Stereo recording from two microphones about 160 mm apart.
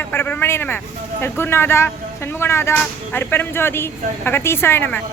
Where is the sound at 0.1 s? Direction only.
10° left (ahead or behind).